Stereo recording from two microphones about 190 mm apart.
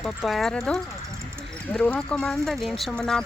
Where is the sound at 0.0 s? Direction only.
Centre (ahead or behind).